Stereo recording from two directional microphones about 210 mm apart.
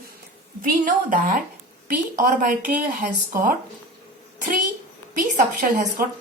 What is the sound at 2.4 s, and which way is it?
Speech, 40° right (ahead or behind).